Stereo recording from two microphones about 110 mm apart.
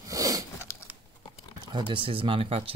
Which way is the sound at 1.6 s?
45° right (ahead or behind).